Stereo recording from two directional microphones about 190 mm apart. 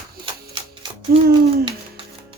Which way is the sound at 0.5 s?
25° right (ahead or behind).